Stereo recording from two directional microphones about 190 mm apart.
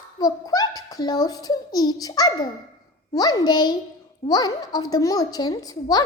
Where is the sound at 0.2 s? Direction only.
20° left (ahead or behind).